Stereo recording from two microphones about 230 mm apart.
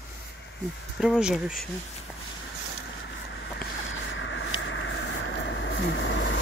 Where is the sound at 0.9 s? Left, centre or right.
Centre.